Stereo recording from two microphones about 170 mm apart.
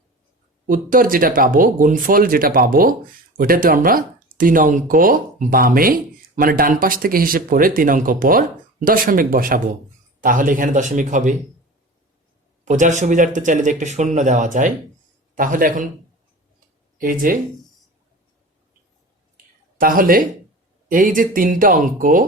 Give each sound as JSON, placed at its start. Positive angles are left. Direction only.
{"t": 0.7, "sound": "speech", "side_deg": -55}
{"t": 12.6, "sound": "speech", "side_deg": -45}
{"t": 17.0, "sound": "speech", "side_deg": -55}
{"t": 19.8, "sound": "speech", "side_deg": -55}